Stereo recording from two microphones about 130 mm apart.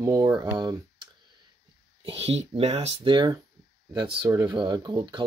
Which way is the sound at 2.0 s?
50° right (ahead or behind).